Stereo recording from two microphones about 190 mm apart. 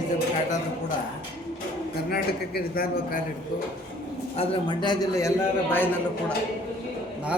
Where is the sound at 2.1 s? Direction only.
55° left (ahead or behind).